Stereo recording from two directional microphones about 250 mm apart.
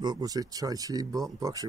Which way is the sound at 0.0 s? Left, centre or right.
Centre.